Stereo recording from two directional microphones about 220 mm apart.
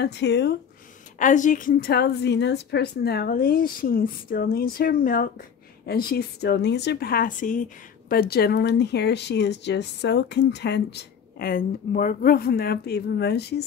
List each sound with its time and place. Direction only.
0.0 s speech: 50° left (ahead or behind)
1.2 s a woman's voice: 35° left (ahead or behind)